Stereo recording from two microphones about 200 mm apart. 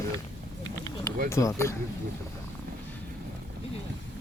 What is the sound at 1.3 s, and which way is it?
Speech, 15° left (ahead or behind).